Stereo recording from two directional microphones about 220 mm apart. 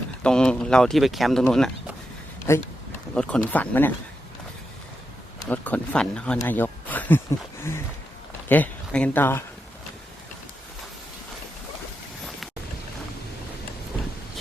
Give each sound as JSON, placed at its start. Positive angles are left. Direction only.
{"t": 0.2, "sound": "speech", "side_deg": 5}
{"t": 2.5, "sound": "speech", "side_deg": 15}
{"t": 5.5, "sound": "speech", "side_deg": 5}
{"t": 8.4, "sound": "speech", "side_deg": 5}